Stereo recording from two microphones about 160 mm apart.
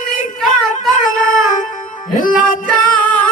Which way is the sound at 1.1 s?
55° left (ahead or behind).